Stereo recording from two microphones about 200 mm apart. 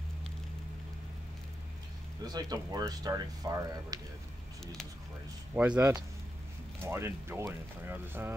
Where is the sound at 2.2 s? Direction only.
20° right (ahead or behind).